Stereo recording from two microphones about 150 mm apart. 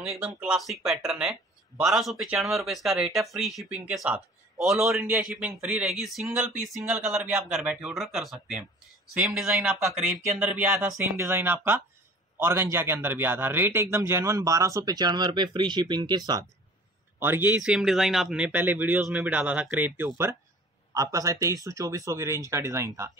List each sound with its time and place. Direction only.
0.1 s speech: 5° right (ahead or behind)
4.8 s a man's voice: 15° right (ahead or behind)
5.3 s a man's voice: 5° right (ahead or behind); by 16.4 s 25° right (ahead or behind)
17.2 s a man's voice: 15° right (ahead or behind)